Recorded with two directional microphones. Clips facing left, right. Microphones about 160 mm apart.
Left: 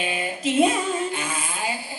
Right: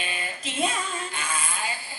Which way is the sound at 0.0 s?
15° left (ahead or behind).